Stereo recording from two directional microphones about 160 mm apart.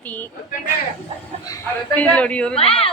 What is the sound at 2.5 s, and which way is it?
Speech, 35° left (ahead or behind).